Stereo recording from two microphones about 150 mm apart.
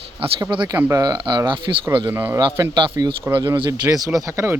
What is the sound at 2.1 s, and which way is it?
Speech, 15° right (ahead or behind).